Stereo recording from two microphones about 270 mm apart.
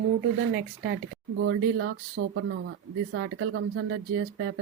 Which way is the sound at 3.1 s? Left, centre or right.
Right.